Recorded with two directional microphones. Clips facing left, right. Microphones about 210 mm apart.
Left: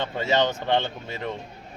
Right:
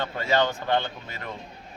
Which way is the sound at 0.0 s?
20° left (ahead or behind).